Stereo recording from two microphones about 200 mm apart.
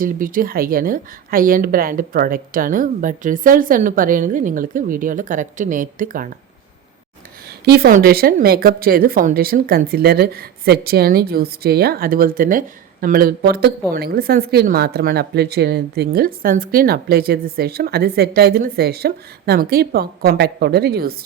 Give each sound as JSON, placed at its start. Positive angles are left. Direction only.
{"t": 0.0, "sound": "speech", "side_deg": -45}
{"t": 7.6, "sound": "speech", "side_deg": -50}